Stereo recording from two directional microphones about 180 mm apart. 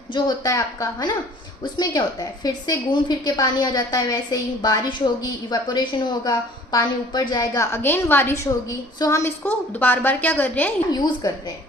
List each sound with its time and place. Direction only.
0.1 s a woman's voice: 20° left (ahead or behind)
10.9 s a woman's voice: 20° left (ahead or behind)